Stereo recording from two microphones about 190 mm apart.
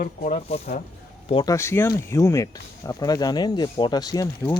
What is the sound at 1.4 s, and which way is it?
Speech, 15° left (ahead or behind).